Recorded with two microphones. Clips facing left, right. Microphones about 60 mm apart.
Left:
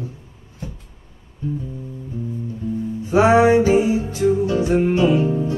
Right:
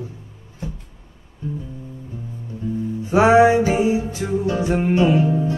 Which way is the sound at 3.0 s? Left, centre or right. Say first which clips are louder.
Right 1 dB; right.